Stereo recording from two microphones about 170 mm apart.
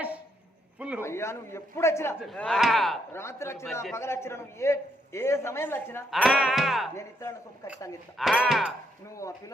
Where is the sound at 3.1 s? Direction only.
15° left (ahead or behind).